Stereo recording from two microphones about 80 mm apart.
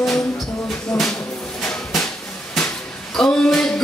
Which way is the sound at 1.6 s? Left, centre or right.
Centre.